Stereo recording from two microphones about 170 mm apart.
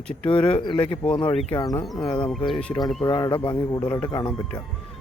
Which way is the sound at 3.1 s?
25° left (ahead or behind).